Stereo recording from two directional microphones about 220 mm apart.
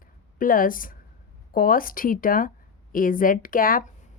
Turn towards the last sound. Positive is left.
turn(degrees=40)  # may be behind; listen again after turning